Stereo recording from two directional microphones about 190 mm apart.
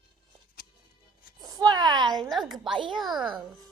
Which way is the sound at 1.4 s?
20° right (ahead or behind).